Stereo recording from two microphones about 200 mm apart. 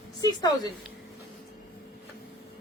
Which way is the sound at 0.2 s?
20° left (ahead or behind).